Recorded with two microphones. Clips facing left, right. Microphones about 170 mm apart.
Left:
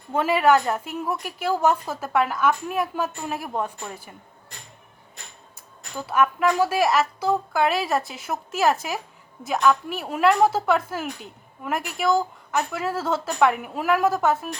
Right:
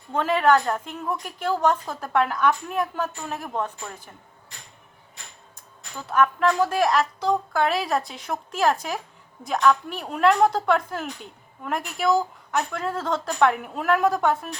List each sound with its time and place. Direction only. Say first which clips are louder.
0.1 s a woman's voice: left 1 dB; 10° left (ahead or behind)
6.0 s a woman's voice: even; 10° left (ahead or behind)